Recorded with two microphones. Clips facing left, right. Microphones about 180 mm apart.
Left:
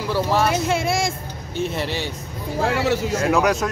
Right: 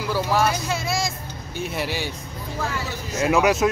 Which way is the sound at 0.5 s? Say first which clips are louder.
Left 5 dB; 25° left (ahead or behind).